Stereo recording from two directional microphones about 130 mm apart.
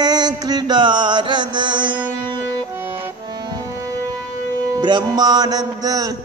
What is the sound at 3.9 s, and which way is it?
Music, 25° right (ahead or behind).